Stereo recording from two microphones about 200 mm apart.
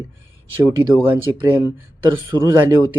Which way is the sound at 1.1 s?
15° right (ahead or behind).